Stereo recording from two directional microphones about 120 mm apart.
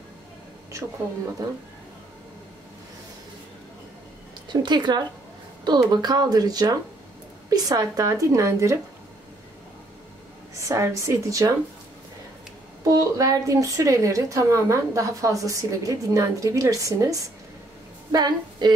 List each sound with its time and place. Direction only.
4.5 s a woman's voice: 40° right (ahead or behind)
10.5 s a woman's voice: 25° right (ahead or behind)
12.8 s a woman's voice: 30° right (ahead or behind)